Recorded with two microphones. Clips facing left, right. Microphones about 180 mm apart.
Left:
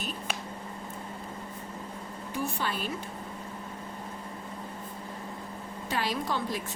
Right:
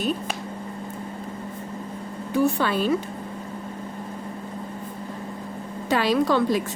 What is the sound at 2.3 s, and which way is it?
Speech, 70° right (ahead or behind).